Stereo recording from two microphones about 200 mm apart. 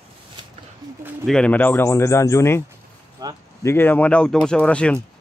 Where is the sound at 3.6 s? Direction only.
10° left (ahead or behind).